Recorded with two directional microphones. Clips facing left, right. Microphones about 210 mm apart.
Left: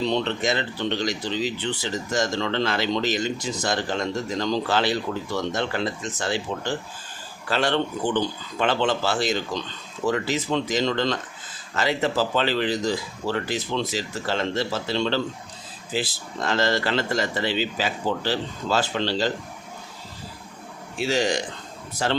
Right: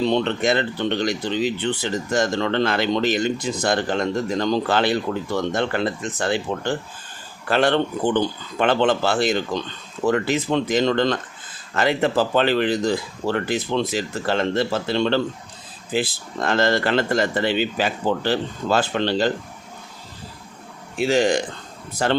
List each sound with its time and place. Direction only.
0.1 s speech: 55° right (ahead or behind)
21.0 s speech: 55° right (ahead or behind)